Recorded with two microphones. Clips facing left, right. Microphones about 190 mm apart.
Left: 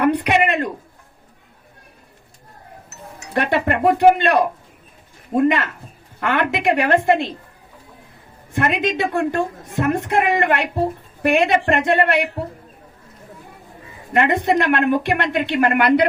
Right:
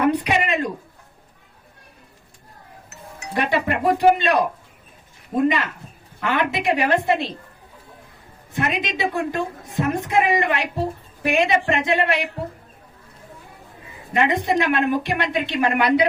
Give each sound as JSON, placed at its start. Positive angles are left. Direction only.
{"t": 0.0, "sound": "a sound", "side_deg": 60}
{"t": 3.3, "sound": "a woman's voice", "side_deg": 55}
{"t": 8.5, "sound": "a woman's voice", "side_deg": 55}
{"t": 14.1, "sound": "a woman's voice", "side_deg": 55}